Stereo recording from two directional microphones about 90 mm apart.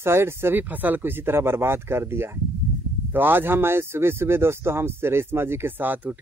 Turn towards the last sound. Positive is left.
turn(degrees=-20)  # may be behind; listen again after turning